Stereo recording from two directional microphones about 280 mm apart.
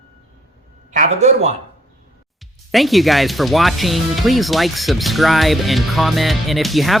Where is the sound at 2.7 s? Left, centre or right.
Centre.